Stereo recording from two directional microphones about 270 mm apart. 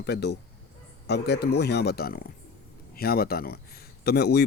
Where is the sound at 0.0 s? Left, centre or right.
Left.